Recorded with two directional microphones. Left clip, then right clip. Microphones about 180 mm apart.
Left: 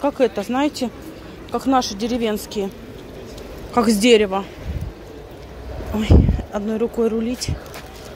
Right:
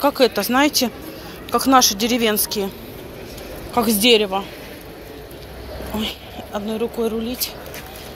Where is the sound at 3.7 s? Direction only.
35° left (ahead or behind).